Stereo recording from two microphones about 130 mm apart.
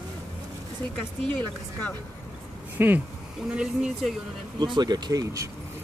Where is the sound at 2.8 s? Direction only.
15° right (ahead or behind).